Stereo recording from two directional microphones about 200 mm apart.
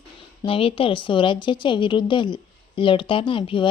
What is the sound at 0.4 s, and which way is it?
A woman's voice, 25° left (ahead or behind).